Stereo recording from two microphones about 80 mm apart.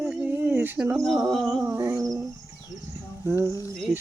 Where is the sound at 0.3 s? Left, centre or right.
Right.